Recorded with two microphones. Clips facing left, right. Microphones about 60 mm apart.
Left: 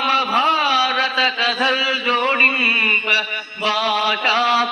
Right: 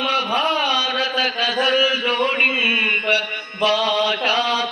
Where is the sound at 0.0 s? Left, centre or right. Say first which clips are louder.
Left 3 dB; left.